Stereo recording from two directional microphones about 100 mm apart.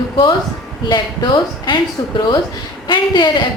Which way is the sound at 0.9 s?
50° left (ahead or behind).